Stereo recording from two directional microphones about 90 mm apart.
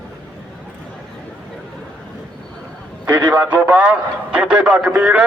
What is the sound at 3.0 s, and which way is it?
A man's voice, 15° right (ahead or behind).